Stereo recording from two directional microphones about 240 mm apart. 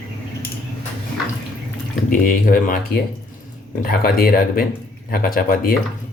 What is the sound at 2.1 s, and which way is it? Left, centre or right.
Speech, left.